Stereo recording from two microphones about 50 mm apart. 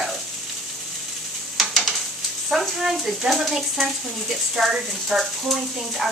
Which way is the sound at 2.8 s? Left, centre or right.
Centre.